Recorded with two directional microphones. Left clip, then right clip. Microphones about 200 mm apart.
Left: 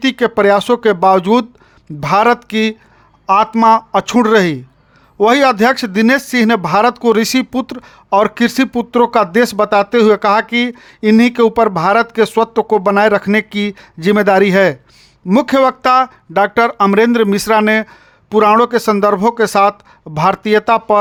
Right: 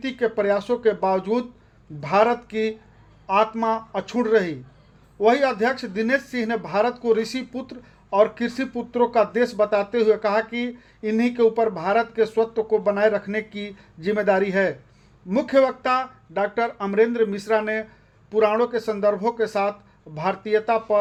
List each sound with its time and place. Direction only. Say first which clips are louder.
0.0 s speech: left 11 dB; 50° left (ahead or behind)